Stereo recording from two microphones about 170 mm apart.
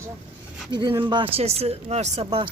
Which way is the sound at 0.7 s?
30° right (ahead or behind).